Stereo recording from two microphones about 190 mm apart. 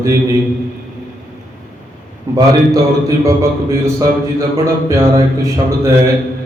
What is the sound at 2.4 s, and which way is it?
A man's voice, 20° right (ahead or behind).